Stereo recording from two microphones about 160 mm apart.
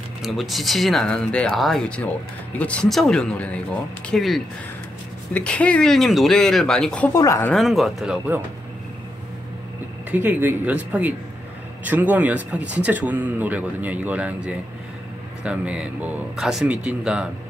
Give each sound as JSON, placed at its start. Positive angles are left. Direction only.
{"t": 0.2, "sound": "speech", "side_deg": 0}
{"t": 7.1, "sound": "a woman's voice", "side_deg": 20}
{"t": 7.5, "sound": "speech", "side_deg": 0}
{"t": 10.1, "sound": "speech", "side_deg": -10}